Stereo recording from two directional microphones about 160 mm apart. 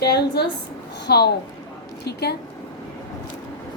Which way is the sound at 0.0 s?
90° left.